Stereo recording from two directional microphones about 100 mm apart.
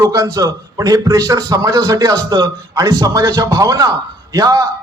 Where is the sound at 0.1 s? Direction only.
35° right (ahead or behind).